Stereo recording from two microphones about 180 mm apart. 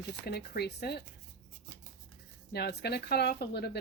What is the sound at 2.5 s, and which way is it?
Speech, 65° left (ahead or behind).